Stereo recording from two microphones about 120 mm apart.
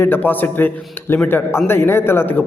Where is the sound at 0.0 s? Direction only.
15° left (ahead or behind).